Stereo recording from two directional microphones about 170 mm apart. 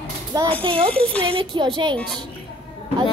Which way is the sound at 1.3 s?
30° right (ahead or behind).